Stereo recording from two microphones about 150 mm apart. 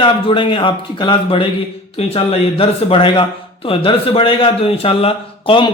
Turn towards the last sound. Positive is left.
turn(degrees=35)  # may be behind; listen again after turning